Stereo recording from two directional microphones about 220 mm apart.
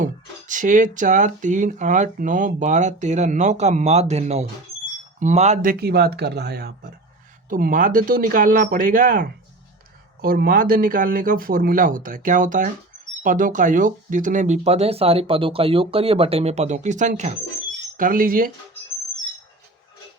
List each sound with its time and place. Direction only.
0.0 s speech: 35° right (ahead or behind)
5.8 s speech: 45° right (ahead or behind)